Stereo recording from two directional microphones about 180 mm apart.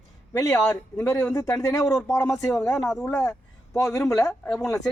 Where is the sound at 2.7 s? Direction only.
Centre (ahead or behind).